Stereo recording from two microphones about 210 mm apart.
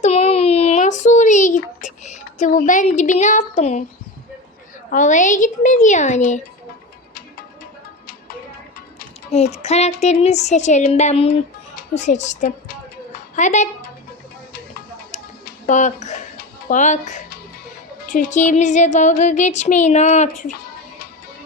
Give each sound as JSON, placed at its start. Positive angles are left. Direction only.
{"t": 0.0, "sound": "a sound", "side_deg": 25}
{"t": 4.9, "sound": "music", "side_deg": 35}
{"t": 9.3, "sound": "music", "side_deg": 30}
{"t": 11.8, "sound": "speech", "side_deg": 35}
{"t": 15.1, "sound": "a sound", "side_deg": 40}
{"t": 18.0, "sound": "music", "side_deg": 40}